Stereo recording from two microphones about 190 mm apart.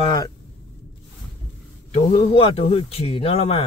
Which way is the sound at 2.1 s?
30° left (ahead or behind).